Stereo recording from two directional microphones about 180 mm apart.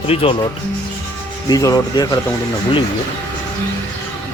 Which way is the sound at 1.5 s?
20° left (ahead or behind).